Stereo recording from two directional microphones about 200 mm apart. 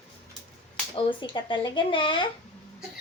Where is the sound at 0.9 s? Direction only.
25° left (ahead or behind).